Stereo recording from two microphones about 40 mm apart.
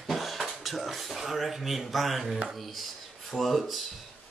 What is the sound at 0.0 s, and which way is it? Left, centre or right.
Speech, centre.